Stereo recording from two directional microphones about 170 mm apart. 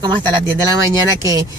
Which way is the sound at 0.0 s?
25° right (ahead or behind).